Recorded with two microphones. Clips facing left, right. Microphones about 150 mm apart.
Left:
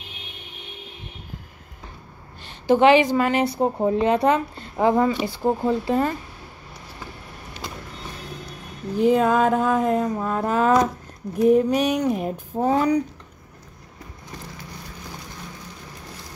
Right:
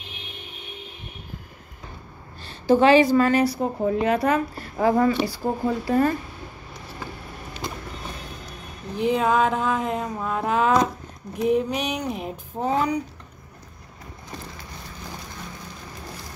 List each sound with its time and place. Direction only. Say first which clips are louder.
2.4 s speech: left 1 dB; 20° left (ahead or behind)
3.5 s speech: left 3 dB; 30° left (ahead or behind)
8.9 s a sound: left 3 dB; 45° left (ahead or behind)